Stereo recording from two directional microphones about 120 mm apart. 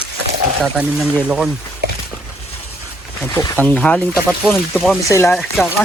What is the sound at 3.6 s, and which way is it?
Speech, 10° left (ahead or behind).